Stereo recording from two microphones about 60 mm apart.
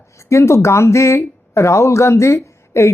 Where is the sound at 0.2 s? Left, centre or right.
Left.